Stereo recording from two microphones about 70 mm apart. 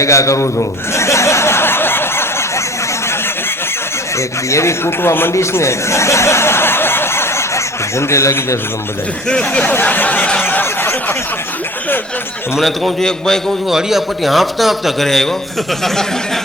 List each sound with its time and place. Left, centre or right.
0.0 s a man's voice: left
0.9 s a sound: left
4.4 s speech: left
5.3 s chuckle: left
9.3 s speech: centre
9.8 s snicker: left
12.5 s a man's voice: centre